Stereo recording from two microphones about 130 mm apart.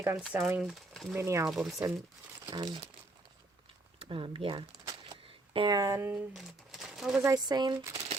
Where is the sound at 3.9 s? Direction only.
45° right (ahead or behind).